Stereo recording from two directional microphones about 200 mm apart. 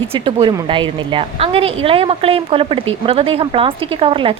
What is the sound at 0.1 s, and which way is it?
A woman's voice, 25° right (ahead or behind).